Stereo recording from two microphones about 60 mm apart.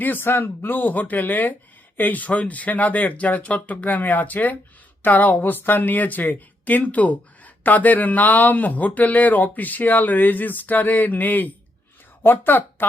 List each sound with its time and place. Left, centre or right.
0.0 s speech: left